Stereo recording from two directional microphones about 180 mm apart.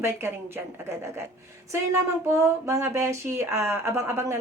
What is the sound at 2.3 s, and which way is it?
A woman's voice, 15° right (ahead or behind).